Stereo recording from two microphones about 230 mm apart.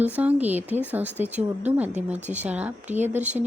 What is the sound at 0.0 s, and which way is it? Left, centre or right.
Speech, centre.